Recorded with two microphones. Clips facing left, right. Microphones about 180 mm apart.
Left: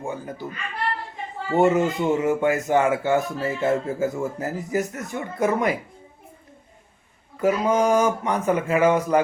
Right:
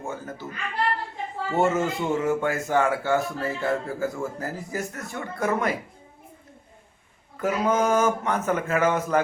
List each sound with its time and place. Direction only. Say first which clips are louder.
0.0 s speech: left 3 dB; 15° left (ahead or behind)
1.5 s speech: left 4 dB; 15° left (ahead or behind)
7.4 s speech: left 3 dB; 10° left (ahead or behind)